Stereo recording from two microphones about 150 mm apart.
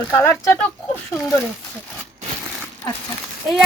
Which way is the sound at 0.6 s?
10° left (ahead or behind).